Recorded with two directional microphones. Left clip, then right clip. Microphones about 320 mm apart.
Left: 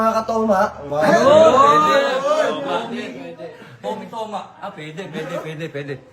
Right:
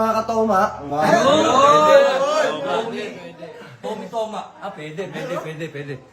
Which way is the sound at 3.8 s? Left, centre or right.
Centre.